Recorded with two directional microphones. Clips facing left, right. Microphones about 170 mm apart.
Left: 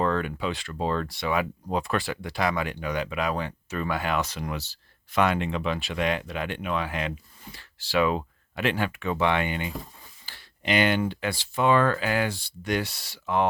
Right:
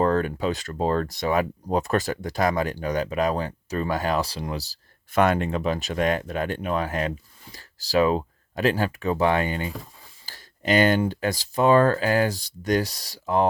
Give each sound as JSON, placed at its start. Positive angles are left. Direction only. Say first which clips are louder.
{"t": 0.0, "sound": "speech", "louder": "right 4 dB", "side_deg": -40}
{"t": 10.2, "sound": "a sound", "louder": "right 4 dB", "side_deg": -40}
{"t": 11.1, "sound": "speech", "louder": "right 4 dB", "side_deg": -40}